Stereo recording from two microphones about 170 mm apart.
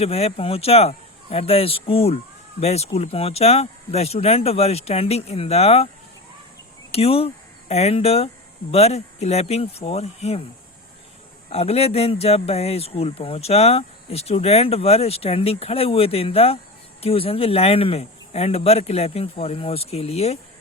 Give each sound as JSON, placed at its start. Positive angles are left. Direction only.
{"t": 0.0, "sound": "speech", "side_deg": 35}
{"t": 6.9, "sound": "speech", "side_deg": 35}
{"t": 11.4, "sound": "speech", "side_deg": 35}